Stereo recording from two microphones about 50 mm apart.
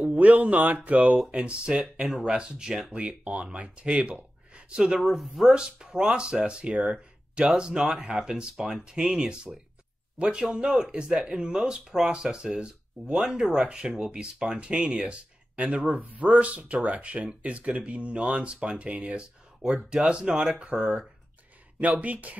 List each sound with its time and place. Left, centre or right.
0.0 s speech: right
4.2 s a sound: right
5.0 s speech: centre
5.5 s speech: centre
6.8 s a sound: right
7.5 s speech: centre
22.0 s speech: right